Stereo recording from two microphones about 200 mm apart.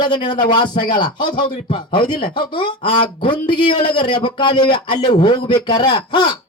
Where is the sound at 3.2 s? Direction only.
25° left (ahead or behind).